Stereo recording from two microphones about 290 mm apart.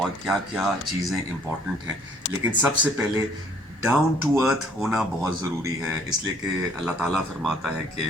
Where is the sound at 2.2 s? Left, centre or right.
Left.